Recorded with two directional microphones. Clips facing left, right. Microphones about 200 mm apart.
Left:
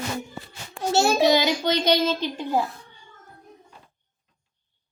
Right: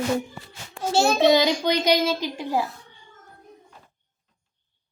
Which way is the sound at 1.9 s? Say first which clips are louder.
Even; 10° right (ahead or behind).